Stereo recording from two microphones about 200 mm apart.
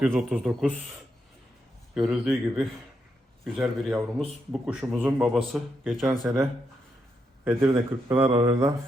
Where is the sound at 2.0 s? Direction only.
Centre (ahead or behind).